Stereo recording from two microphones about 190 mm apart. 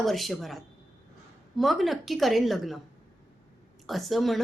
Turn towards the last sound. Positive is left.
turn(degrees=0)  # may be behind; listen again after turning